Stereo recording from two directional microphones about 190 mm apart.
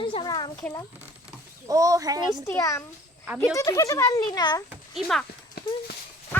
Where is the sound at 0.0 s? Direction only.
25° left (ahead or behind).